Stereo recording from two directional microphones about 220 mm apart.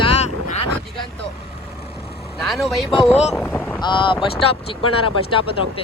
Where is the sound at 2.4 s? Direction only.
Centre (ahead or behind).